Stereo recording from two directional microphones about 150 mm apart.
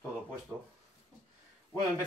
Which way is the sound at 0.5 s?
15° right (ahead or behind).